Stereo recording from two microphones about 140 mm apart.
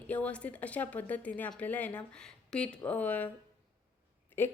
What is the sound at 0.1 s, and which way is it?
A woman's voice, 10° left (ahead or behind).